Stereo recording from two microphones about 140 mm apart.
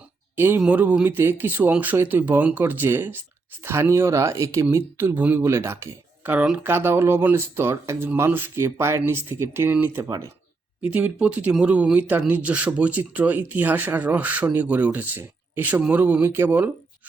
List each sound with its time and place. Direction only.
0.3 s speech: 15° right (ahead or behind)
10.8 s speech: 10° right (ahead or behind)